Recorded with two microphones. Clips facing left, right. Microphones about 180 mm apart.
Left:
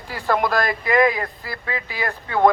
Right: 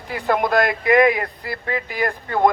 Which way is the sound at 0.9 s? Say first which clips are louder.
Right 2 dB; 55° right (ahead or behind).